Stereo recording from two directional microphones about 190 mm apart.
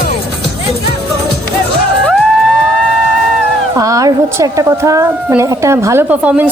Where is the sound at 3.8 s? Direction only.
15° right (ahead or behind).